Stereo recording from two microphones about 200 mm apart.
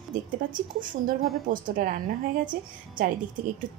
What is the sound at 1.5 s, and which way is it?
A woman's voice, 45° right (ahead or behind).